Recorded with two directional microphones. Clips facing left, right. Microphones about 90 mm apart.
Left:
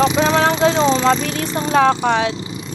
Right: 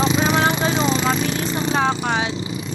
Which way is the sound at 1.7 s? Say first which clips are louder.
Left 8 dB; 90° left.